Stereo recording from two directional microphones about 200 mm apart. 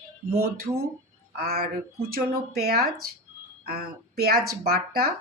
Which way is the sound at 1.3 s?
50° right (ahead or behind).